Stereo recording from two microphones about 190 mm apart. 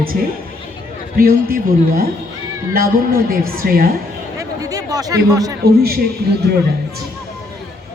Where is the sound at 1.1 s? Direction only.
50° right (ahead or behind).